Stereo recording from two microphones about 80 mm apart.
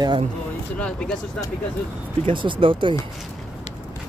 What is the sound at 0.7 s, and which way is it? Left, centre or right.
Speech, centre.